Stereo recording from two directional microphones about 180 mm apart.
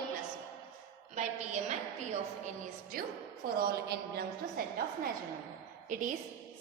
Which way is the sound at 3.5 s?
60° right (ahead or behind).